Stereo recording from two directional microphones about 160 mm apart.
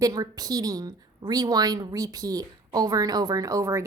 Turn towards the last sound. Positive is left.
turn(degrees=-20)  # may be behind; listen again after turning